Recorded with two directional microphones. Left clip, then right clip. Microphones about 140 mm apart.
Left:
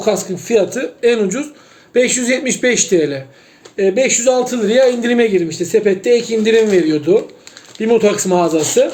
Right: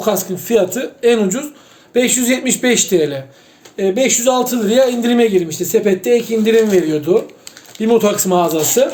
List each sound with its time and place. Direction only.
0.0 s a man's voice: 20° left (ahead or behind)